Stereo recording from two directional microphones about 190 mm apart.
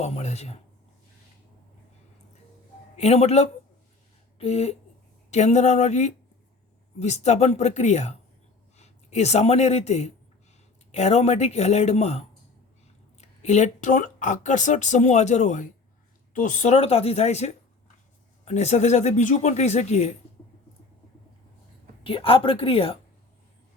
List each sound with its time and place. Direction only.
0.0 s speech: 35° left (ahead or behind)
2.9 s a man's voice: 35° left (ahead or behind)
22.0 s a woman's voice: 30° left (ahead or behind)